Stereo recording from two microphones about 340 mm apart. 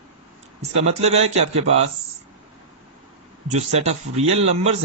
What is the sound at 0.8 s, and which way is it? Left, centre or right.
Speech, centre.